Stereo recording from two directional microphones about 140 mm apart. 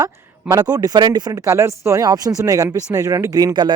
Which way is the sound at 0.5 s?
25° right (ahead or behind).